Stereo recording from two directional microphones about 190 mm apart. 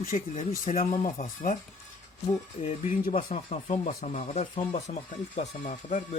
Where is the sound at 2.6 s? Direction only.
40° left (ahead or behind).